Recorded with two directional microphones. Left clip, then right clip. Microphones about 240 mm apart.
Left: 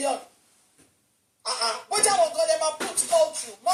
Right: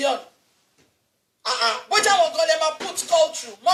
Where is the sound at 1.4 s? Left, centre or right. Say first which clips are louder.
Right 5 dB; right.